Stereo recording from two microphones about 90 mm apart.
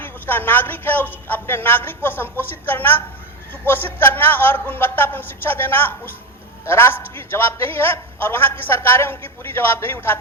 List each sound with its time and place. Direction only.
0.0 s a man's voice: 20° left (ahead or behind)